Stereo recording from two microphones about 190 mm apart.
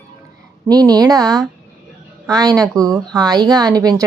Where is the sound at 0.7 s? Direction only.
20° right (ahead or behind).